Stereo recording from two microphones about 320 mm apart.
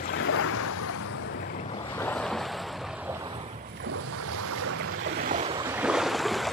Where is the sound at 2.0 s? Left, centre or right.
Centre.